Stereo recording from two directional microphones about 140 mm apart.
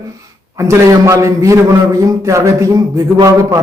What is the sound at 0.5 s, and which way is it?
A man's voice, 20° right (ahead or behind).